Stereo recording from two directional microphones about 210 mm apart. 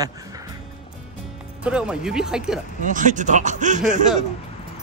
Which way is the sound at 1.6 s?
5° right (ahead or behind).